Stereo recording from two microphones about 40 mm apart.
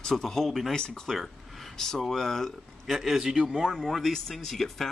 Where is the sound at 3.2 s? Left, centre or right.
Centre.